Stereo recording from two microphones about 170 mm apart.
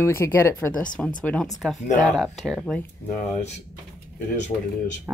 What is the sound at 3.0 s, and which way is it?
Speech, 45° left (ahead or behind).